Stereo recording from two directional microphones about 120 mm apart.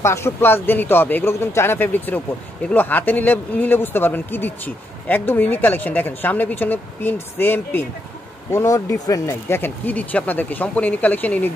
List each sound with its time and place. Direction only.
0.0 s speech: 20° left (ahead or behind)